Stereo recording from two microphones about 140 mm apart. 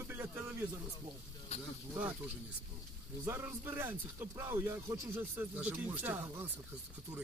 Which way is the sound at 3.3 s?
15° right (ahead or behind).